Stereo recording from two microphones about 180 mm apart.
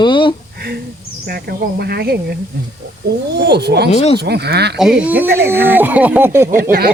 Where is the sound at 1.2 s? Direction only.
60° right (ahead or behind).